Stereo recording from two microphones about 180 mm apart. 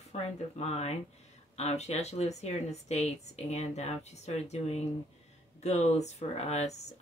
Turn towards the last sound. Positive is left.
turn(degrees=35)  # may be behind; listen again after turning